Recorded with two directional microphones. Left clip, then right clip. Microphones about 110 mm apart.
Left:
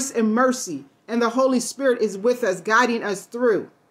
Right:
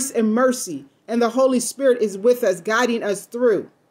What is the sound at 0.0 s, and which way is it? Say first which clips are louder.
A woman's voice: right 1 dB; 15° right (ahead or behind).